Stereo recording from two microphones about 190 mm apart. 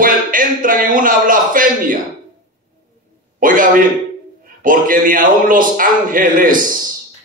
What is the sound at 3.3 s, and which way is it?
A man's voice, 45° right (ahead or behind).